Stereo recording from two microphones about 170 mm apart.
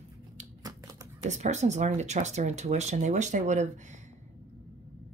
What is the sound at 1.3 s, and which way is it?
A woman's voice, 45° right (ahead or behind).